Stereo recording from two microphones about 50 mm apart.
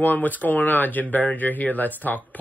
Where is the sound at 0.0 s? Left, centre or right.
Left.